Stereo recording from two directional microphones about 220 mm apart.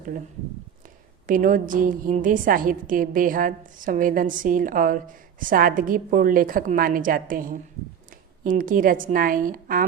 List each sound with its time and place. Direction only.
1.3 s a woman's voice: 40° right (ahead or behind)